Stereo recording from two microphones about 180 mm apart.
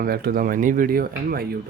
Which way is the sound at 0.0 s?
55° right (ahead or behind).